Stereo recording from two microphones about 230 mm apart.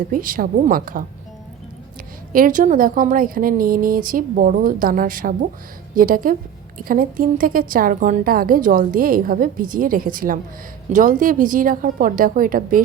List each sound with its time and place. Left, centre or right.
0.1 s a woman's voice: right
2.3 s a woman's voice: right